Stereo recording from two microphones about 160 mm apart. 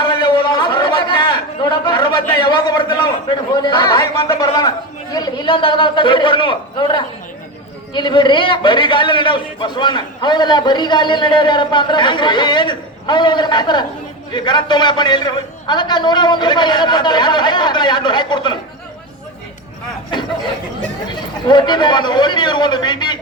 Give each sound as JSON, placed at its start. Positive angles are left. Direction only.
{"t": 0.0, "sound": "a sound", "side_deg": 30}
{"t": 1.9, "sound": "a man's voice", "side_deg": 30}
{"t": 21.1, "sound": "a man's voice", "side_deg": 30}